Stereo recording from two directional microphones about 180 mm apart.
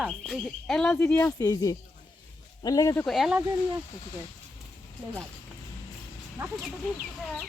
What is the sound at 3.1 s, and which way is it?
Speech, centre (ahead or behind).